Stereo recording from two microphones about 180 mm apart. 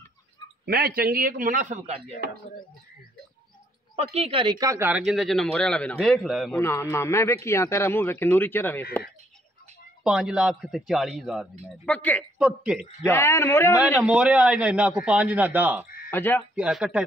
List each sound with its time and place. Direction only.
0.7 s a man's voice: 60° right (ahead or behind)
4.1 s speech: 30° right (ahead or behind); by 6.6 s centre (ahead or behind)
6.6 s speech: 15° left (ahead or behind)
10.0 s speech: 5° right (ahead or behind)
12.4 s speech: 5° right (ahead or behind)
13.0 s speech: 15° left (ahead or behind)
13.7 s a man's voice: 5° right (ahead or behind)
16.1 s speech: 10° left (ahead or behind)
16.5 s speech: 5° right (ahead or behind)